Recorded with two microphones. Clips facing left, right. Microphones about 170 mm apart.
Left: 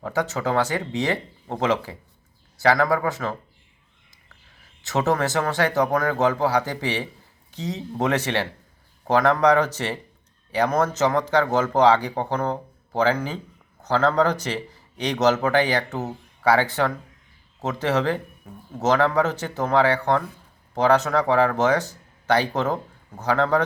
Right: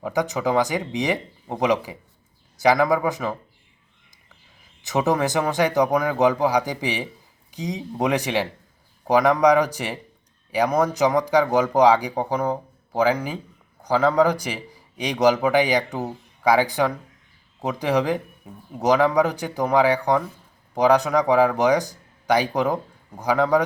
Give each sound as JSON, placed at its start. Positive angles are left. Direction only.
{"t": 0.0, "sound": "a man's voice", "side_deg": -15}
{"t": 4.8, "sound": "a man's voice", "side_deg": -15}